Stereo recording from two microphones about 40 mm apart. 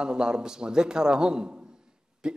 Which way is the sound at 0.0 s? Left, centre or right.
Right.